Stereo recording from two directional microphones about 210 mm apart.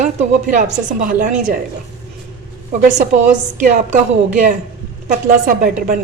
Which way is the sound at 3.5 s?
35° right (ahead or behind).